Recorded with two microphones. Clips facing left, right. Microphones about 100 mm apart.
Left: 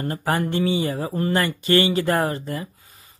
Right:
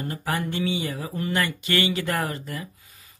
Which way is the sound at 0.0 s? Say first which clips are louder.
Left 5 dB; 45° left (ahead or behind).